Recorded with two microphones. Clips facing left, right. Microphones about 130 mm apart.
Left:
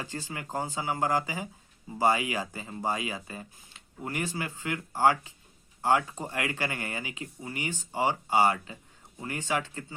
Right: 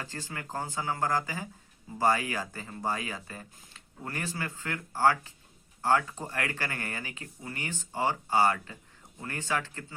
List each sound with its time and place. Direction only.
0.0 s speech: 15° left (ahead or behind)